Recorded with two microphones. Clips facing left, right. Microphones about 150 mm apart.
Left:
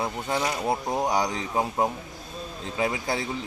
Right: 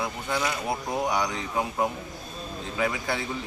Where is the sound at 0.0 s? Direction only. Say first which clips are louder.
Left 2 dB; 35° left (ahead or behind).